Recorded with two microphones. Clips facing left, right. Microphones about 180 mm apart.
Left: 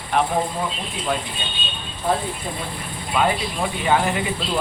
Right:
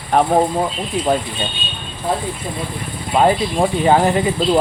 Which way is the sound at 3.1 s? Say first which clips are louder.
Right 7 dB; 40° right (ahead or behind).